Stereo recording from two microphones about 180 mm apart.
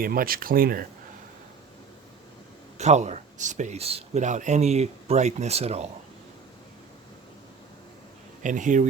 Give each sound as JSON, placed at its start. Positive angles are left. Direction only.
{"t": 0.0, "sound": "speech", "side_deg": -55}
{"t": 2.7, "sound": "speech", "side_deg": -40}
{"t": 8.4, "sound": "speech", "side_deg": -45}